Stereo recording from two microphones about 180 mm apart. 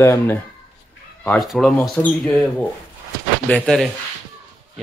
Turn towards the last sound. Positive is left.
turn(degrees=5)  # may be behind; listen again after turning